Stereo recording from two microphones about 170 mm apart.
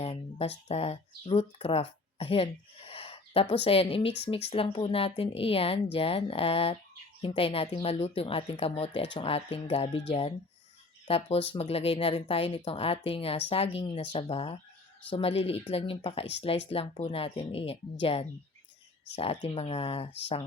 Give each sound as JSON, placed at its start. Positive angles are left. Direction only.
{"t": 0.0, "sound": "speech", "side_deg": 35}